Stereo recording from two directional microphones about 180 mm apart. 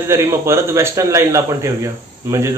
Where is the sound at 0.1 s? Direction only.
15° right (ahead or behind).